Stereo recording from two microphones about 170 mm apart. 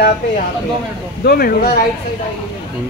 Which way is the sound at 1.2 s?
60° left (ahead or behind).